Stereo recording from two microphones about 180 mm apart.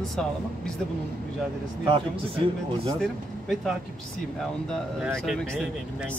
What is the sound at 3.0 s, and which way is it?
Speech, centre (ahead or behind).